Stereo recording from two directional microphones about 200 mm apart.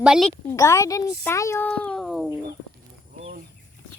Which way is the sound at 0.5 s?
15° left (ahead or behind).